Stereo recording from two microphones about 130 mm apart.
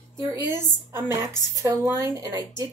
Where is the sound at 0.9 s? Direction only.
20° right (ahead or behind).